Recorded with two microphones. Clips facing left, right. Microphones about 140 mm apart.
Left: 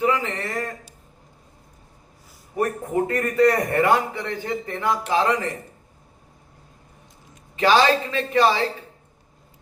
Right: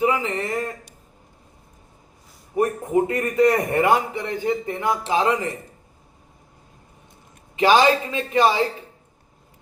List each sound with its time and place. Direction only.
0.0 s a man's voice: 15° right (ahead or behind)
2.6 s a man's voice: 20° right (ahead or behind)
7.5 s a man's voice: 15° right (ahead or behind)